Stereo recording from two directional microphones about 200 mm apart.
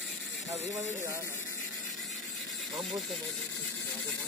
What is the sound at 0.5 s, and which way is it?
Speech, 35° right (ahead or behind).